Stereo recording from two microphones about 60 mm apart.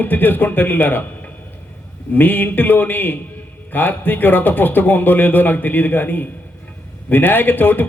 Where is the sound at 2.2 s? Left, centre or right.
Left.